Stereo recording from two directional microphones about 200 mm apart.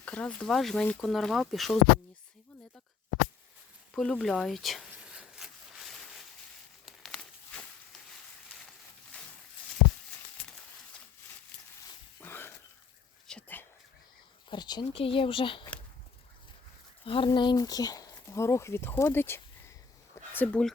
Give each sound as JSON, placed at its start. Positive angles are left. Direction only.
{"t": 0.0, "sound": "speech", "side_deg": 5}
{"t": 3.9, "sound": "a sound", "side_deg": 0}
{"t": 12.2, "sound": "a sound", "side_deg": 10}
{"t": 13.2, "sound": "whispering", "side_deg": 5}
{"t": 14.5, "sound": "speech", "side_deg": 20}
{"t": 17.1, "sound": "speech", "side_deg": 25}